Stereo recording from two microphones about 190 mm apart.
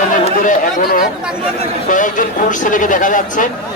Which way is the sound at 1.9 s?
45° left (ahead or behind).